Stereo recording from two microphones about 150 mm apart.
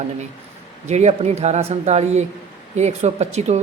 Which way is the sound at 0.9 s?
50° right (ahead or behind).